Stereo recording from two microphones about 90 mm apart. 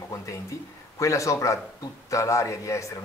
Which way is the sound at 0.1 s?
35° left (ahead or behind).